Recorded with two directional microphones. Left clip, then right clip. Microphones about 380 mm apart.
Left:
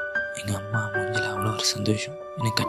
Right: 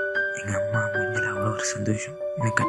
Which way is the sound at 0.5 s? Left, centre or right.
Centre.